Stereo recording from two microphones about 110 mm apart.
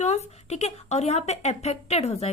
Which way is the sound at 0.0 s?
85° left.